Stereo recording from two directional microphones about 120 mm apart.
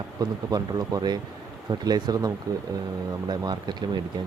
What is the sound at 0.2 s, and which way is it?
Speech, 35° right (ahead or behind).